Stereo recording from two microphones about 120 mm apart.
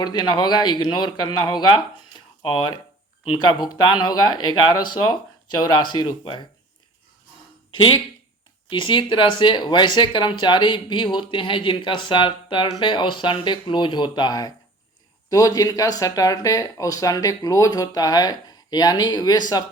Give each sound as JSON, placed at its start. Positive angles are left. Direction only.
{"t": 0.0, "sound": "speech", "side_deg": 35}
{"t": 3.3, "sound": "speech", "side_deg": 35}
{"t": 8.7, "sound": "speech", "side_deg": 45}